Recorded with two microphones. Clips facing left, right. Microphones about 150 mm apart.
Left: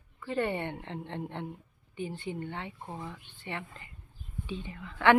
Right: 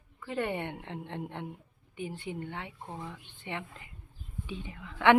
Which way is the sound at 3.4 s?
15° right (ahead or behind).